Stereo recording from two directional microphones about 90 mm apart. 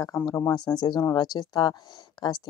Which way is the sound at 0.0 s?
45° left (ahead or behind).